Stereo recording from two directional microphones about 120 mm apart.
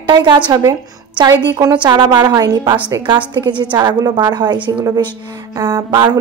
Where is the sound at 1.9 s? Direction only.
35° right (ahead or behind).